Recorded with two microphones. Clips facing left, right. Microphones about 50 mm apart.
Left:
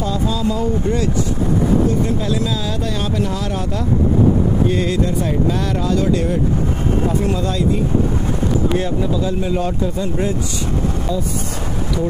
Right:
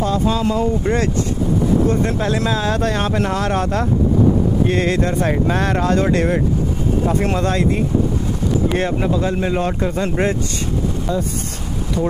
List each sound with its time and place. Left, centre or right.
0.0 s speech: right